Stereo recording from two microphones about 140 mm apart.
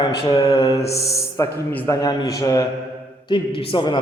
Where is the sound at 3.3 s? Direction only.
35° left (ahead or behind).